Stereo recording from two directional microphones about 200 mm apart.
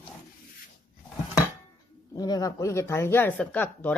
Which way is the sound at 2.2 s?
20° left (ahead or behind).